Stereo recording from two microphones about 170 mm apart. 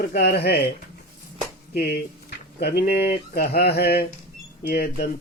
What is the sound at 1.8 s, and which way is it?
Speech, 65° left (ahead or behind).